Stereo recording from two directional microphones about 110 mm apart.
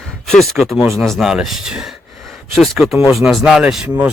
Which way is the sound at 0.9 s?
Centre (ahead or behind).